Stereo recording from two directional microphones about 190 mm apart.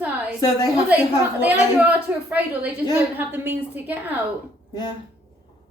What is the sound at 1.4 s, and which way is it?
Speech, 10° right (ahead or behind).